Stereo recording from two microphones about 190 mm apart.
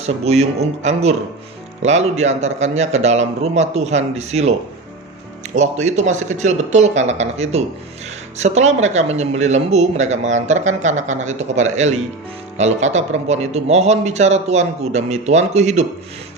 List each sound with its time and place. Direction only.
0.0 s speech: 35° right (ahead or behind)
5.5 s speech: 35° right (ahead or behind)